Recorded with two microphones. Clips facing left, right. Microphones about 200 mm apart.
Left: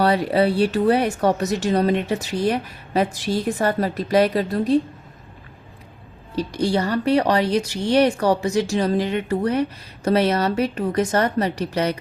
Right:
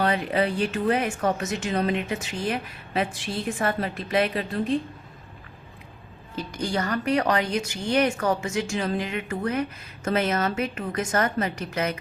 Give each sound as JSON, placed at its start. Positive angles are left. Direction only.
{"t": 0.0, "sound": "speech", "side_deg": 35}
{"t": 6.3, "sound": "speech", "side_deg": 30}